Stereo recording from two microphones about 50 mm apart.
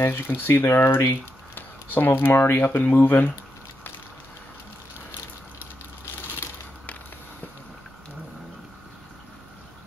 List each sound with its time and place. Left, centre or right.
0.0 s speech: left
1.5 s speech: left